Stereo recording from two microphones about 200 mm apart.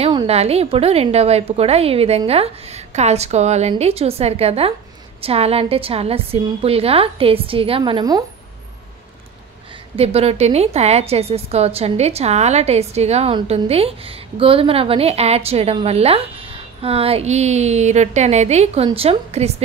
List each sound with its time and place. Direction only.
0.0 s a woman's voice: 25° right (ahead or behind)
9.9 s a woman's voice: 30° right (ahead or behind)